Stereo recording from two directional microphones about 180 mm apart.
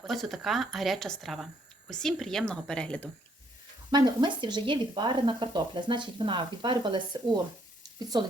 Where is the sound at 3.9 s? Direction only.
20° right (ahead or behind).